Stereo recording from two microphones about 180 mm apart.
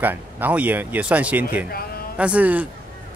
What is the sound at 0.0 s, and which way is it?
Speech, 10° right (ahead or behind).